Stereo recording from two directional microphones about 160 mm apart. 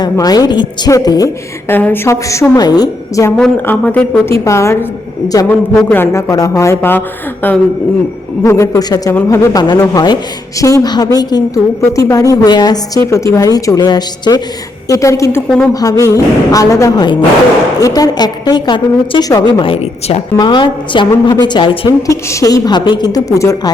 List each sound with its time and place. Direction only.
0.0 s a woman's voice: 25° left (ahead or behind)
1.7 s a woman's voice: 10° left (ahead or behind)
3.3 s a woman's voice: 10° left (ahead or behind)
8.4 s a woman's voice: 20° left (ahead or behind)
15.4 s speech: 5° left (ahead or behind)
15.7 s a woman's voice: 20° left (ahead or behind); by 20.2 s 40° left (ahead or behind)
20.4 s a woman's voice: 30° left (ahead or behind)